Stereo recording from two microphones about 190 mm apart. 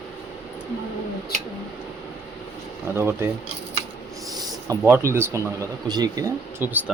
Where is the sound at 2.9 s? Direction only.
15° right (ahead or behind).